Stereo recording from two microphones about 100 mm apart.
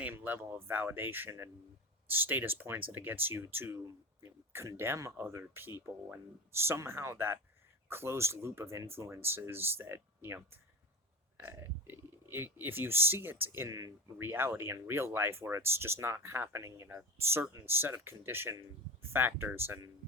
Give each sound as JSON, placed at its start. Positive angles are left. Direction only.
{"t": 0.0, "sound": "speech", "side_deg": -20}